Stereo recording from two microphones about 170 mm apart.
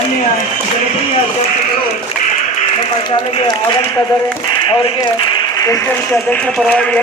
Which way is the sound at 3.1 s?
30° left (ahead or behind).